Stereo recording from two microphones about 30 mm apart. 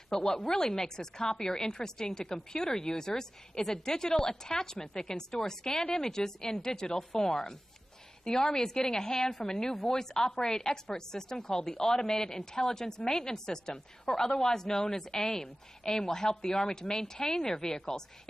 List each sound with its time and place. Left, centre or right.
0.1 s a woman's voice: centre